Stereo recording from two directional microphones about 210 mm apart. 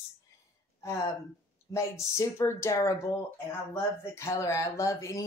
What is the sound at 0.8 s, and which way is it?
Speech, 15° left (ahead or behind).